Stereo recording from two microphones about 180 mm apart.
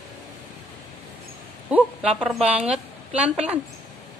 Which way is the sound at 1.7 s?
5° right (ahead or behind).